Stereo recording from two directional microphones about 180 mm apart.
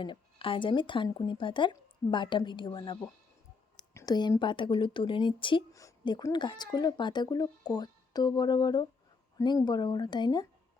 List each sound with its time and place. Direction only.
0.0 s speech: 30° left (ahead or behind)